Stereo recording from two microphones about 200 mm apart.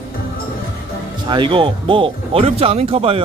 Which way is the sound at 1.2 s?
25° right (ahead or behind).